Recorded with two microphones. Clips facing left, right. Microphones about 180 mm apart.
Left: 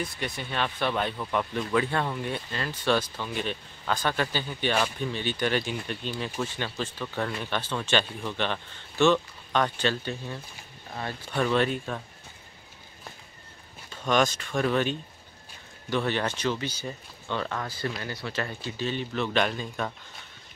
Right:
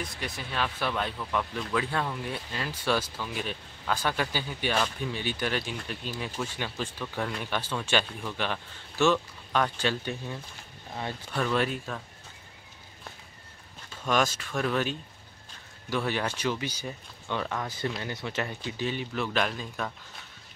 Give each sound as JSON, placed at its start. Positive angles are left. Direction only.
{"t": 0.0, "sound": "speech", "side_deg": 0}
{"t": 14.0, "sound": "speech", "side_deg": -5}